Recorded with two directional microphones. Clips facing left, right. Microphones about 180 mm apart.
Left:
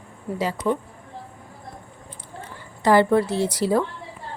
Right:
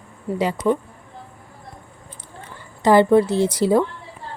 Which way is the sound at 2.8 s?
20° right (ahead or behind).